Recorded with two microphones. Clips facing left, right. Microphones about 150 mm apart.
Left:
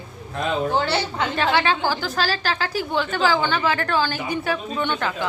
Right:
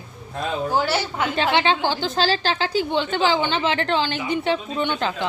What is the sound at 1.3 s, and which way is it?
A woman's voice, 20° right (ahead or behind).